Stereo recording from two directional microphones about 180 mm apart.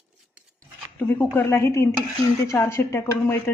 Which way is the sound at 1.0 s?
10° left (ahead or behind).